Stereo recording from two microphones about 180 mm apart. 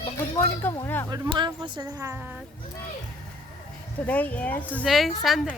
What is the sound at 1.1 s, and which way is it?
Speech, 25° right (ahead or behind).